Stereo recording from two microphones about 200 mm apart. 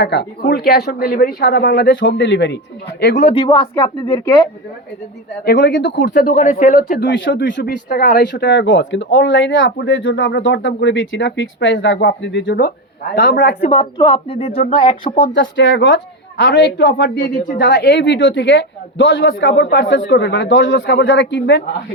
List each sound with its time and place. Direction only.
0.0 s speech: 55° left (ahead or behind)
3.3 s speech: 20° left (ahead or behind)
5.5 s speech: 60° left (ahead or behind)
6.2 s speech: 40° left (ahead or behind)
7.1 s speech: 65° left (ahead or behind)
7.9 s speech: 45° left (ahead or behind)
13.6 s speech: 25° left (ahead or behind)
15.2 s speech: 65° left (ahead or behind)